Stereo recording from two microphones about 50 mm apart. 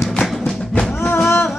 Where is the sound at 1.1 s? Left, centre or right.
Left.